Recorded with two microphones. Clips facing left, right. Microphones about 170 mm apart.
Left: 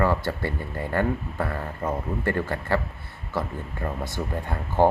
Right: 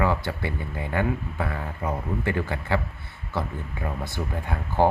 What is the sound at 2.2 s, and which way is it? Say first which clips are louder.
Speech: left 2 dB; 15° right (ahead or behind).